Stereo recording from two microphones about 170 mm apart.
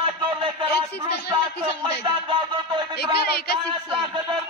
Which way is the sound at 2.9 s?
70° left (ahead or behind).